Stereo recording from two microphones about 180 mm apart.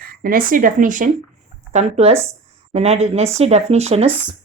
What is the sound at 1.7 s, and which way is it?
Speech, 35° right (ahead or behind).